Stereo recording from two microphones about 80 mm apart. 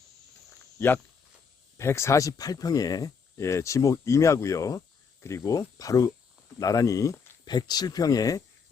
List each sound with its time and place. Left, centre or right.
1.8 s speech: left
3.4 s speech: left
7.4 s speech: left